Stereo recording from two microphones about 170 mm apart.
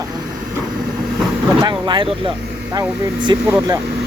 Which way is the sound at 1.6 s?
25° right (ahead or behind).